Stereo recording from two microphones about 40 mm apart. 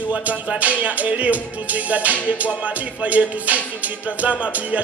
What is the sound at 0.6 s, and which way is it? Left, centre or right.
Music, right.